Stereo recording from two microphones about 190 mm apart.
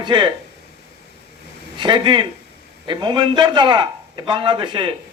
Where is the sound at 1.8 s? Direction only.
25° right (ahead or behind).